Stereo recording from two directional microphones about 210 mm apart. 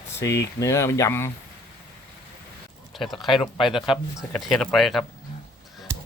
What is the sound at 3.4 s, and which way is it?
Speech, 25° left (ahead or behind).